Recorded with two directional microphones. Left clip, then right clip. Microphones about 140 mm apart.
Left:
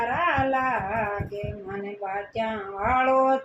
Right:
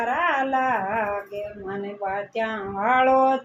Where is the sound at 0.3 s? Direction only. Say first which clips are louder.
Even; 55° right (ahead or behind).